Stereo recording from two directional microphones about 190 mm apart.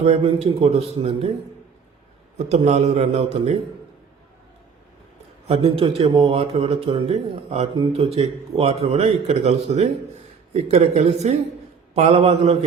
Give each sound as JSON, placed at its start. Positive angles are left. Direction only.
{"t": 0.0, "sound": "speech", "side_deg": -30}
{"t": 2.5, "sound": "speech", "side_deg": -35}
{"t": 5.5, "sound": "speech", "side_deg": -30}